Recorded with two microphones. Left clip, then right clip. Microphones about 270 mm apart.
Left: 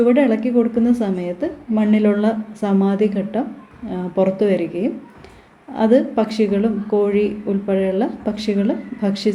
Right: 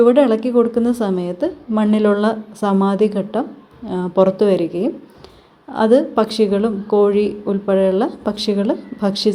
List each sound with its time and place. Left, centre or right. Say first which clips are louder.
0.0 s speech: right 3 dB; right